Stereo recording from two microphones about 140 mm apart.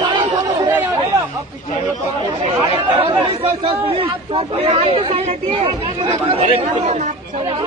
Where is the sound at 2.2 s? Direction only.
40° right (ahead or behind).